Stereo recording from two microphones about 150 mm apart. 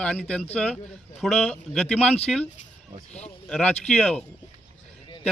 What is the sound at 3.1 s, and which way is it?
Speech, 45° left (ahead or behind).